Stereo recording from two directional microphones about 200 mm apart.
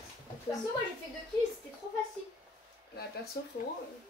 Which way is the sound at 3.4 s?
55° left (ahead or behind).